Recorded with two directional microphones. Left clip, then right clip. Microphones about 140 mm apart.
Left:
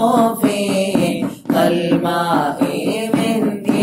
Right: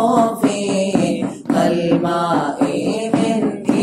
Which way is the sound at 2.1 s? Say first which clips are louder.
Left 1 dB; 45° left (ahead or behind).